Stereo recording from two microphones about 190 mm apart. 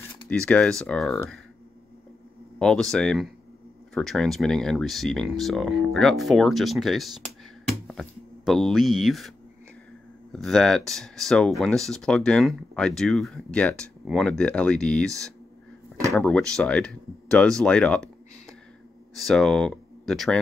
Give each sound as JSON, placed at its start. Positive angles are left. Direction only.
{"t": 0.3, "sound": "speech", "side_deg": 5}
{"t": 2.6, "sound": "speech", "side_deg": 5}
{"t": 10.3, "sound": "speech", "side_deg": 0}
{"t": 19.1, "sound": "speech", "side_deg": 0}